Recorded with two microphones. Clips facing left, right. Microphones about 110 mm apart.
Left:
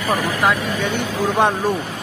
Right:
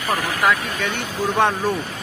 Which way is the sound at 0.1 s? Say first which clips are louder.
Left 1 dB; 20° left (ahead or behind).